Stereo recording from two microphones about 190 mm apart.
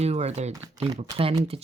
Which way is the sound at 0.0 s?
35° right (ahead or behind).